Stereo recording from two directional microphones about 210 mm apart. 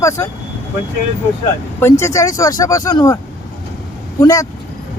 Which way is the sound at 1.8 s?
15° left (ahead or behind).